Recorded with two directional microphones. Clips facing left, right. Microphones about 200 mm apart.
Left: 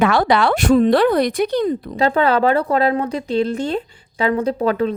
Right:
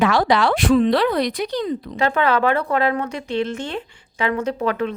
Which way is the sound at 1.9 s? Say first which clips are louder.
Left 3 dB; 35° left (ahead or behind).